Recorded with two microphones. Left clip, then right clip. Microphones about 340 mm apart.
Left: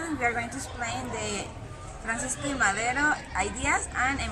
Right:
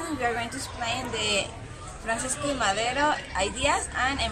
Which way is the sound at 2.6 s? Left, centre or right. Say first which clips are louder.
Even; centre.